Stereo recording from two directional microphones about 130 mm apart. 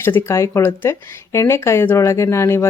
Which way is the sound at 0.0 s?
20° left (ahead or behind).